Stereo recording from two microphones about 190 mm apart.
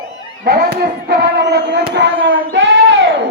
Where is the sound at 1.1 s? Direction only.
65° right (ahead or behind).